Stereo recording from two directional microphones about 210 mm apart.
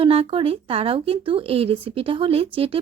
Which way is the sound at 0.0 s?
25° right (ahead or behind).